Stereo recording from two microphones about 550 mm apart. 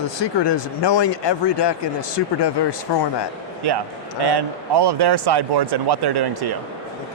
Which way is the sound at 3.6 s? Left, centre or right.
Right.